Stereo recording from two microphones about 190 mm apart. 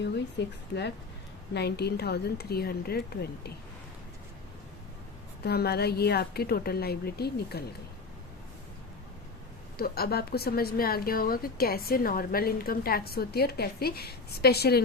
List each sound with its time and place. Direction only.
0.0 s a woman's voice: 65° left (ahead or behind)
5.5 s a woman's voice: 55° left (ahead or behind)
9.7 s a woman's voice: 55° left (ahead or behind)